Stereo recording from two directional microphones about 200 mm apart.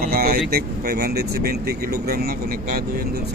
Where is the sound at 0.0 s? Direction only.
50° right (ahead or behind).